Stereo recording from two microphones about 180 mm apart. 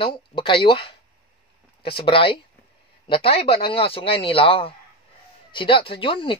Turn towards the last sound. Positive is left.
turn(degrees=30)  # may be behind; listen again after turning